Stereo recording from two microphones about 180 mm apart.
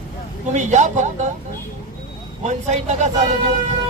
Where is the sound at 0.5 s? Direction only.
40° right (ahead or behind).